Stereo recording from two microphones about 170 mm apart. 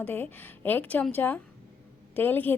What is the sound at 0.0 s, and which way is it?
A woman's voice, 10° left (ahead or behind).